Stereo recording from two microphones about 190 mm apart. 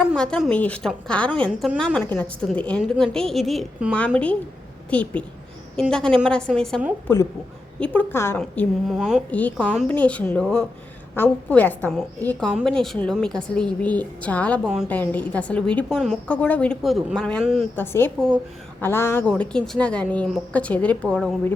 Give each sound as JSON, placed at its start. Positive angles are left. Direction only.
{"t": 0.0, "sound": "a woman's voice", "side_deg": 5}
{"t": 8.4, "sound": "a woman's voice", "side_deg": 0}